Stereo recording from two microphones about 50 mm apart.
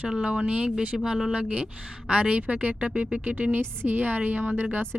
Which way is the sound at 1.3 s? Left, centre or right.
Right.